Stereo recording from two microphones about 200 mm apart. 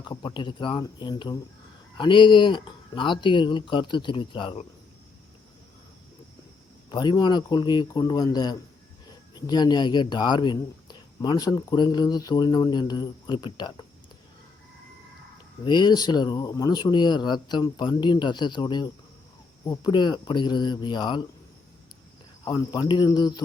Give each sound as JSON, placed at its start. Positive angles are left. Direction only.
{"t": 0.0, "sound": "speech", "side_deg": 20}
{"t": 6.9, "sound": "speech", "side_deg": 20}
{"t": 15.6, "sound": "speech", "side_deg": 20}
{"t": 22.4, "sound": "speech", "side_deg": 20}